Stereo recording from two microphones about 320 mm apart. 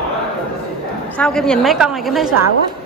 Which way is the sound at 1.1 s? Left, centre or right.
Centre.